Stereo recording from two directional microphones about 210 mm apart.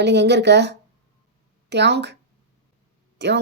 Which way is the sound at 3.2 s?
55° right (ahead or behind).